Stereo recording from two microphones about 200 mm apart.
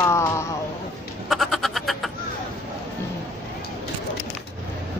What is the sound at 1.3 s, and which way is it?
Frog, centre (ahead or behind).